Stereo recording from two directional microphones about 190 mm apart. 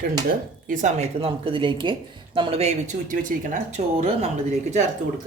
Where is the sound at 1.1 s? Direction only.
30° right (ahead or behind).